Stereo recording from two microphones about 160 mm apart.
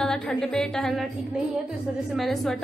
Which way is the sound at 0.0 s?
5° left (ahead or behind).